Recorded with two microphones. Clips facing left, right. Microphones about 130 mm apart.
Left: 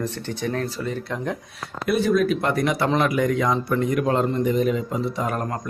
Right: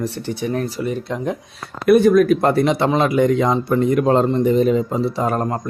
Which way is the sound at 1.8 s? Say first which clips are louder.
Right 8 dB; 55° right (ahead or behind).